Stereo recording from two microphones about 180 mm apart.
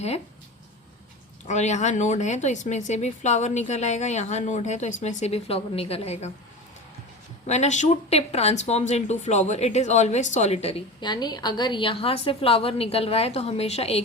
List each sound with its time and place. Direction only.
1.5 s speech: 40° left (ahead or behind)
7.4 s speech: 40° left (ahead or behind)